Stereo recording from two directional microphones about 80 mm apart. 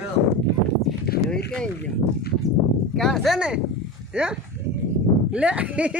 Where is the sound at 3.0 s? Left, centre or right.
Centre.